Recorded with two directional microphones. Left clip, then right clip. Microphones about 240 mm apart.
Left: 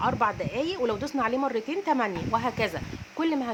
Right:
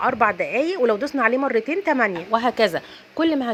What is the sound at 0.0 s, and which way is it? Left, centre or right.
A woman's voice, centre.